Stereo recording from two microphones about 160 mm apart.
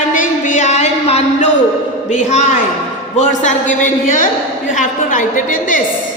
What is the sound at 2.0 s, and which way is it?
A woman's voice, 50° left (ahead or behind).